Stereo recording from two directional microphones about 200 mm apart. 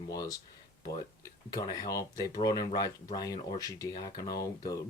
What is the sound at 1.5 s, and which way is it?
Speech, 20° left (ahead or behind).